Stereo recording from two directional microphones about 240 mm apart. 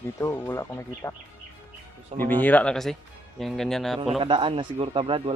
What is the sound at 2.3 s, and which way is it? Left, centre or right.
Speech, centre.